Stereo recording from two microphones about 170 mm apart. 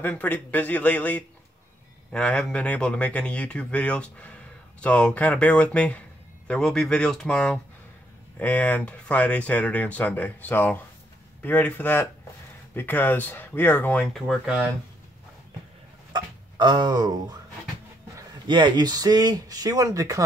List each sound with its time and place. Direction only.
0.0 s speech: 10° left (ahead or behind); by 14.7 s 5° right (ahead or behind)
16.1 s speech: 25° right (ahead or behind)